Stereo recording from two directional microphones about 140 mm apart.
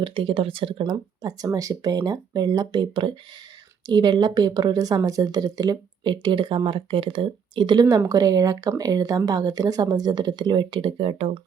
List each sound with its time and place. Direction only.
0.0 s speech: 40° right (ahead or behind)